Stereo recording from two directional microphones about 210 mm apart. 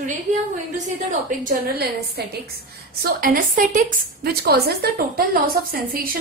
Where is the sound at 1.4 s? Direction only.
45° right (ahead or behind).